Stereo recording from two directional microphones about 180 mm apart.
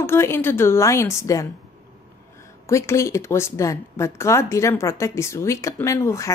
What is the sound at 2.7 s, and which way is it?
Speech, 15° left (ahead or behind).